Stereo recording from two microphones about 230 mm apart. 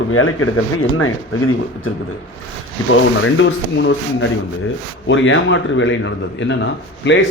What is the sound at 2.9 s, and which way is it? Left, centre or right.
Speech, left.